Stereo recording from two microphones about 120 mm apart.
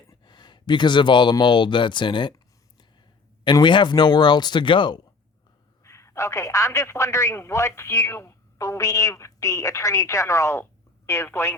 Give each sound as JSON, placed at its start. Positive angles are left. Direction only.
{"t": 0.1, "sound": "speech", "side_deg": 35}
{"t": 3.4, "sound": "speech", "side_deg": 40}
{"t": 5.8, "sound": "a man's voice", "side_deg": 25}